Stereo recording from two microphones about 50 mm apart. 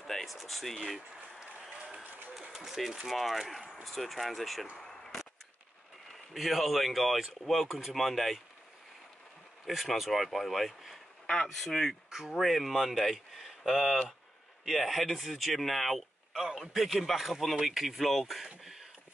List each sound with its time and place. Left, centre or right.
0.0 s speech: centre
2.0 s a sound: right
2.5 s speech: centre
6.3 s speech: centre
9.7 s speech: centre
11.2 s speech: centre
12.1 s speech: centre
18.6 s a sound: centre